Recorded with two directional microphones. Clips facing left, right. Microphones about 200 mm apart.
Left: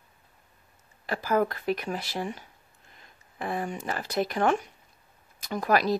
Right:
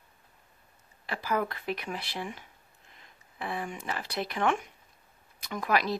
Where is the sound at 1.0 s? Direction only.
45° left (ahead or behind).